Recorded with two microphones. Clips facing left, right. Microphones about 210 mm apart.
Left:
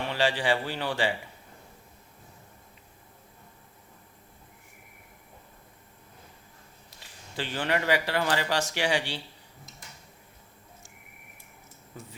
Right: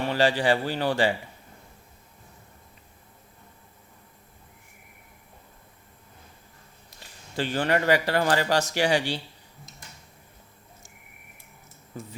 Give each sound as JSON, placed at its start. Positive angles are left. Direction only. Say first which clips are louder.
{"t": 0.1, "sound": "a man's voice", "louder": "right 4 dB", "side_deg": -40}
{"t": 7.0, "sound": "speech", "louder": "right 6 dB", "side_deg": -45}